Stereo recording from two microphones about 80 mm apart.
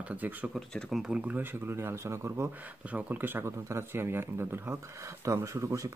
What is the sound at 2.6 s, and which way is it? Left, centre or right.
Speech, centre.